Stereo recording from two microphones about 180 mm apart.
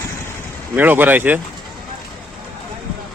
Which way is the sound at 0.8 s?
10° right (ahead or behind).